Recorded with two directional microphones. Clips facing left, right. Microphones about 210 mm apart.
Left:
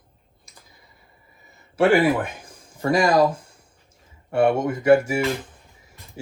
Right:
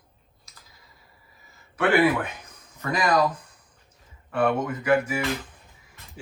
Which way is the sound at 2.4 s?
30° left (ahead or behind).